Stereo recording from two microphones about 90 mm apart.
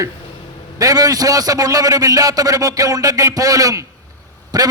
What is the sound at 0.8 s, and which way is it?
A man's voice, 40° right (ahead or behind).